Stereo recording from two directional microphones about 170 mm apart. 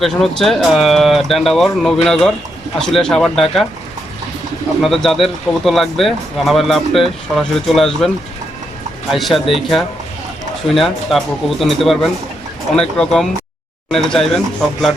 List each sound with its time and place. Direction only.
0.0 s speech: centre (ahead or behind)
4.8 s speech: centre (ahead or behind)